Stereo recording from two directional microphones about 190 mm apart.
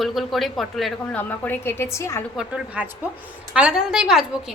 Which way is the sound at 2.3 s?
5° right (ahead or behind).